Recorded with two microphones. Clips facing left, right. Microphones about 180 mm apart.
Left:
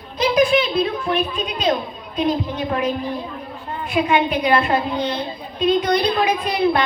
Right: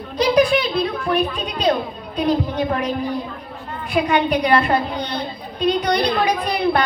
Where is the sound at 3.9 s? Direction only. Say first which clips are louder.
Right 1 dB; 40° right (ahead or behind).